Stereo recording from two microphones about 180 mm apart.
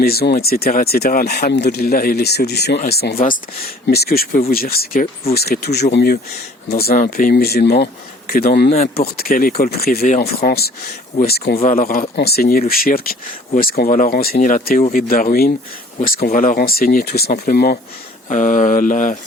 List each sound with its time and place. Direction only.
0.0 s speech: 60° left (ahead or behind)
6.9 s speech: 50° left (ahead or behind)
8.7 s speech: 35° left (ahead or behind)
9.1 s speech: 55° left (ahead or behind)
18.3 s speech: 45° left (ahead or behind)